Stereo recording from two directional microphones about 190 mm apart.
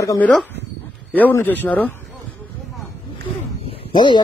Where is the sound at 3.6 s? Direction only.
30° left (ahead or behind).